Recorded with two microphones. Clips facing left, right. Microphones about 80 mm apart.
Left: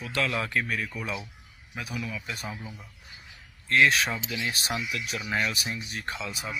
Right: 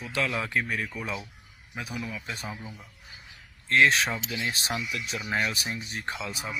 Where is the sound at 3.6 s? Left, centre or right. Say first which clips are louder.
Even; right.